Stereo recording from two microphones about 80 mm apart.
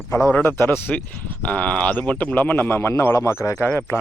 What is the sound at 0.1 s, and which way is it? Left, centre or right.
A man's voice, left.